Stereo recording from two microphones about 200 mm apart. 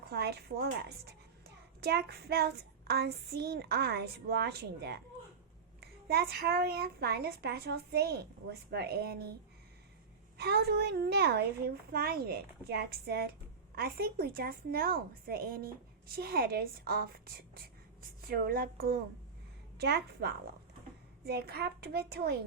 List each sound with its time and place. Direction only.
0.1 s a child's voice: 55° right (ahead or behind)
10.3 s a child's voice: 55° right (ahead or behind)